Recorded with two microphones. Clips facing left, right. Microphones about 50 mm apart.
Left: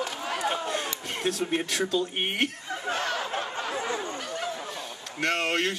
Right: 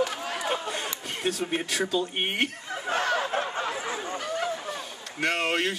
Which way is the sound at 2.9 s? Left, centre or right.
Right.